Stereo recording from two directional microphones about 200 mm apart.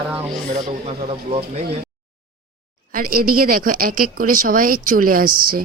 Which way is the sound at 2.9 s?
45° right (ahead or behind).